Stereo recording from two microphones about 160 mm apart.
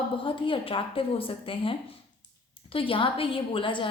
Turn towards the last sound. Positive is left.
turn(degrees=30)  # may be behind; listen again after turning